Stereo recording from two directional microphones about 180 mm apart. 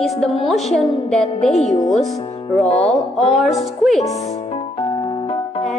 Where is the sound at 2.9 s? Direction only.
Centre (ahead or behind).